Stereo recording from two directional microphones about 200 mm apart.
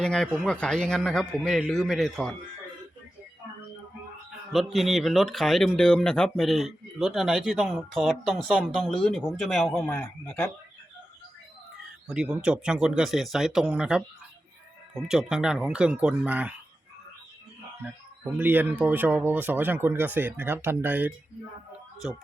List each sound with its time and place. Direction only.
0.0 s speech: 5° left (ahead or behind)
4.5 s speech: centre (ahead or behind)
12.0 s speech: 5° right (ahead or behind)
15.0 s speech: 5° right (ahead or behind)
18.3 s speech: 10° right (ahead or behind)